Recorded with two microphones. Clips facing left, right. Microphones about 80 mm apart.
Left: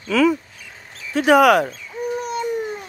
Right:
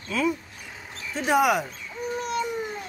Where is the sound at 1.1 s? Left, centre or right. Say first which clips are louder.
Left 8 dB; left.